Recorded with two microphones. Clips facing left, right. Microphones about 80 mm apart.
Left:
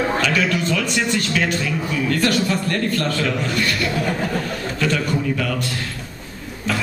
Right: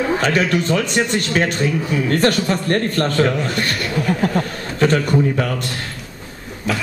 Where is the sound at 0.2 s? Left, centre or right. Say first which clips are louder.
Right 2 dB; right.